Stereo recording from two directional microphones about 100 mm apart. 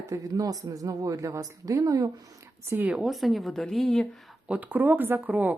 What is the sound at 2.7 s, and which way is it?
Speech, 15° right (ahead or behind).